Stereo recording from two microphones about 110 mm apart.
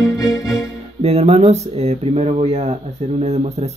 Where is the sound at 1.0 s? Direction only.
70° right (ahead or behind).